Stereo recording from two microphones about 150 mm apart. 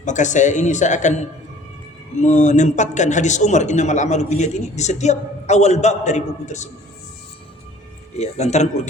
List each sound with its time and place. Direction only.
0.0 s speech: 55° left (ahead or behind)
8.1 s speech: 45° left (ahead or behind)